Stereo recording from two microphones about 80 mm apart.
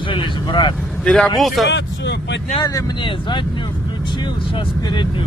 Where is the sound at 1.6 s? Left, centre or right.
Centre.